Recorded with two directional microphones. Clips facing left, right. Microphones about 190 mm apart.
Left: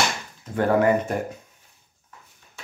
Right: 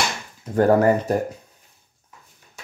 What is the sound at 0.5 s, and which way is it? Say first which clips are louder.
Speech: right 3 dB; 40° right (ahead or behind).